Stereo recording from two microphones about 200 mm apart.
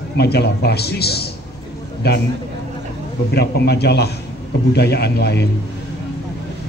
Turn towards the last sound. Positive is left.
turn(degrees=55)  # may be behind; listen again after turning